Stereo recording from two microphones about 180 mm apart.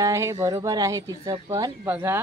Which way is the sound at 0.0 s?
15° right (ahead or behind).